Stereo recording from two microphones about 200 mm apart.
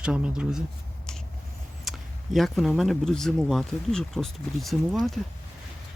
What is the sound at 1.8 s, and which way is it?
Speech, centre (ahead or behind).